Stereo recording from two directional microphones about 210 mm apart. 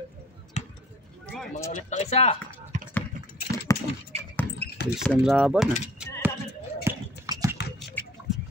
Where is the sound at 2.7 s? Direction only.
35° right (ahead or behind).